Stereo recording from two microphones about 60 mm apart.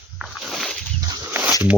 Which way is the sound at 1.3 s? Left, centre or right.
Right.